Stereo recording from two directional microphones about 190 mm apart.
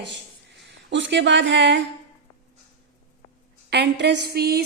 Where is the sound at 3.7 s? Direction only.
60° right (ahead or behind).